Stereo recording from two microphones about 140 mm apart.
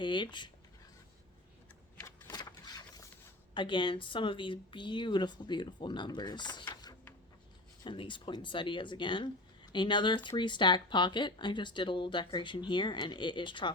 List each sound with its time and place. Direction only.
0.0 s speech: 35° left (ahead or behind)
2.0 s a sound: 15° left (ahead or behind)
2.3 s vehicle: 30° left (ahead or behind)
3.5 s speech: 35° left (ahead or behind)